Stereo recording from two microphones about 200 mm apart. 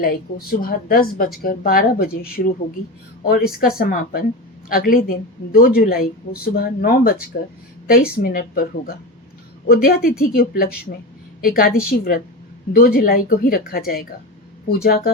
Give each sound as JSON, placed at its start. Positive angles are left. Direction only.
{"t": 0.0, "sound": "speech", "side_deg": 50}
{"t": 3.2, "sound": "speech", "side_deg": 45}